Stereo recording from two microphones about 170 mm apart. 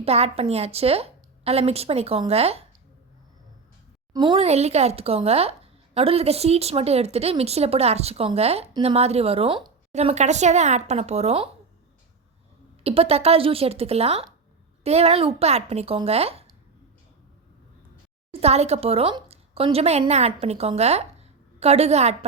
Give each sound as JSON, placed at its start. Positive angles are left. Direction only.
{"t": 0.0, "sound": "speech", "side_deg": -35}
{"t": 4.1, "sound": "speech", "side_deg": -25}
{"t": 9.9, "sound": "speech", "side_deg": -40}
{"t": 12.8, "sound": "speech", "side_deg": -35}
{"t": 18.3, "sound": "speech", "side_deg": -35}